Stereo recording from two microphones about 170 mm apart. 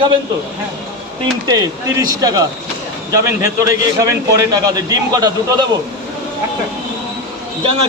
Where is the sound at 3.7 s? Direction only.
20° right (ahead or behind).